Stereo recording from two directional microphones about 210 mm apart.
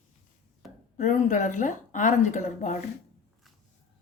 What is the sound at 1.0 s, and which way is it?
Speech, 35° left (ahead or behind).